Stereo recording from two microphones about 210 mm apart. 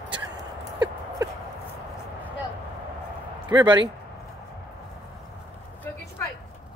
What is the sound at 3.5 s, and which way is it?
Speech, 20° right (ahead or behind).